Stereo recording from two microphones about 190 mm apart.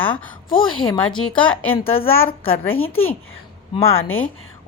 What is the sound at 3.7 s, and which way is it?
Speech, 30° left (ahead or behind).